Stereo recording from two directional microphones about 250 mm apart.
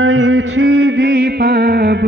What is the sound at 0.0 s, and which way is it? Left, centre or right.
Mantra, right.